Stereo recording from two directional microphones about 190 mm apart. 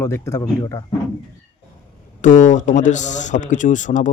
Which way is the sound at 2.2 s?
40° left (ahead or behind).